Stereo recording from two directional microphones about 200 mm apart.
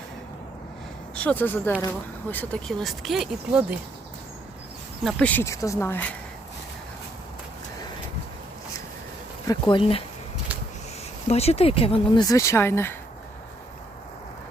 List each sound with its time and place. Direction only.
1.1 s speech: 5° left (ahead or behind)
5.0 s speech: 5° left (ahead or behind)
9.5 s speech: 25° left (ahead or behind)
11.3 s speech: 30° left (ahead or behind); by 13.0 s 10° left (ahead or behind)